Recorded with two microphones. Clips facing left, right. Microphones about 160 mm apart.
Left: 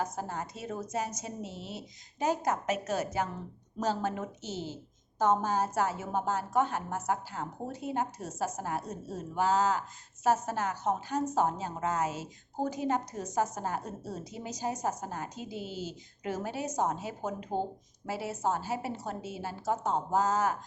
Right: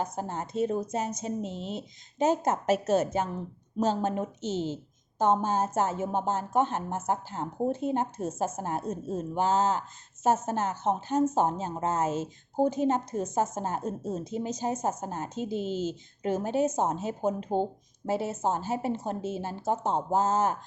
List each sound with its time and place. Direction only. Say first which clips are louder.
0.0 s a woman's voice: right 2 dB; 20° right (ahead or behind)